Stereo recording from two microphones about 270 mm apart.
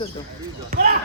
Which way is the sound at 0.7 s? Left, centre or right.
Right.